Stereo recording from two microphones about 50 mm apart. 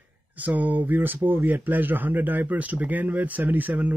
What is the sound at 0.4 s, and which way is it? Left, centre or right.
Speech, right.